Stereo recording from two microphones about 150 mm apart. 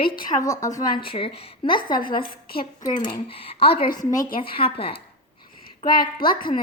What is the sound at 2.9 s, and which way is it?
Speech, 60° left (ahead or behind).